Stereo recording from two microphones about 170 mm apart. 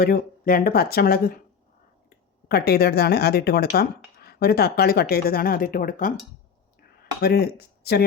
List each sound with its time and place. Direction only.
0.0 s speech: 60° left (ahead or behind)
7.2 s speech: 65° left (ahead or behind)